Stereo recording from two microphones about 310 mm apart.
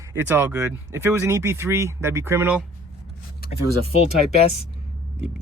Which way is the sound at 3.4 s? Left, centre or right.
Left.